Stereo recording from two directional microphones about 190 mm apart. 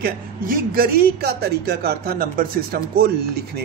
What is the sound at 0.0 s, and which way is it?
Speech, 50° right (ahead or behind).